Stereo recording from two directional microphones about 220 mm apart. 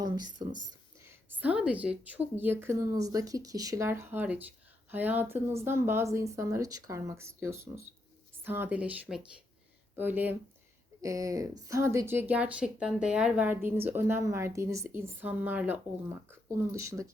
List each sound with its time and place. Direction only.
0.0 s speech: 20° right (ahead or behind)
0.9 s a sound: 10° right (ahead or behind)
1.6 s speech: 5° right (ahead or behind)